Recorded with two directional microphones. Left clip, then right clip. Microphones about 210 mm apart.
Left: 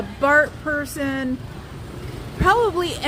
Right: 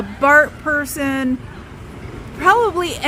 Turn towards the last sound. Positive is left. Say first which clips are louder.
# right 3 dB
turn(degrees=-20)  # may be behind; listen again after turning